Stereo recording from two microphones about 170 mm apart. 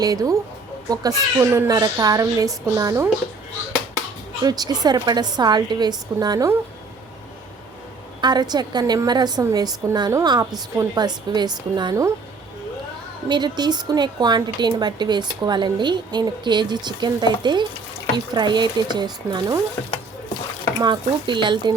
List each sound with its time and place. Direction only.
0.0 s speech: 20° right (ahead or behind)
4.4 s speech: 25° right (ahead or behind)
8.2 s speech: 25° right (ahead or behind)
13.2 s speech: 25° right (ahead or behind)
20.7 s speech: 25° right (ahead or behind)